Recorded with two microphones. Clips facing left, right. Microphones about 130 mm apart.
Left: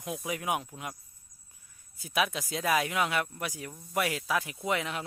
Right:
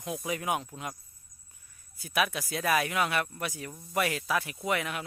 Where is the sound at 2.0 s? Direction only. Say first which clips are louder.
Even; 20° left (ahead or behind).